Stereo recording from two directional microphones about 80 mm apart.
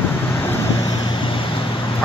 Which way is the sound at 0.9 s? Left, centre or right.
Left.